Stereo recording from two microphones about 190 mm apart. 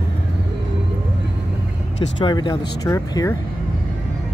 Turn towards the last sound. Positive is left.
turn(degrees=15)  # may be behind; listen again after turning